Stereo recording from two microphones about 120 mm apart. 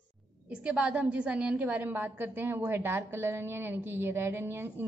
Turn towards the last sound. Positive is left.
turn(degrees=-20)  # may be behind; listen again after turning